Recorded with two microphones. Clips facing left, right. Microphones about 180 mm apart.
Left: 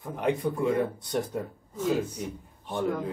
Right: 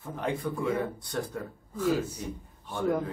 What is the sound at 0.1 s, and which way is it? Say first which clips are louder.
Speech: left 4 dB; 20° left (ahead or behind).